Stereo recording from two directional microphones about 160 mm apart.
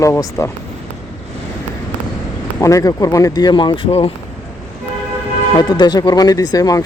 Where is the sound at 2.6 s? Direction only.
20° left (ahead or behind).